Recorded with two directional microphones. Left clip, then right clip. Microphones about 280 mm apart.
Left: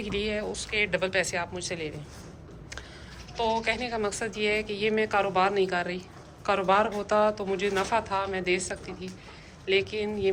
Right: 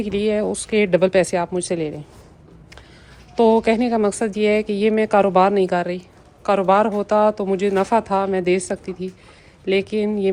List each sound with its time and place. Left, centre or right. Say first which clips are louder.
0.0 s a woman's voice: right 10 dB; centre
3.3 s a woman's voice: right 12 dB; centre